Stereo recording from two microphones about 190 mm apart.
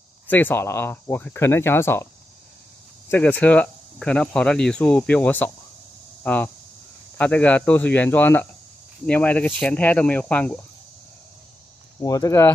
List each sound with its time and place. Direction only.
0.3 s speech: 10° left (ahead or behind)
3.1 s speech: 10° left (ahead or behind)
12.0 s speech: 15° left (ahead or behind)